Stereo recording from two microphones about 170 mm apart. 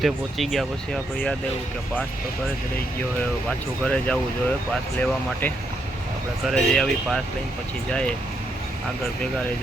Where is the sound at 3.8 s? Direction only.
5° left (ahead or behind).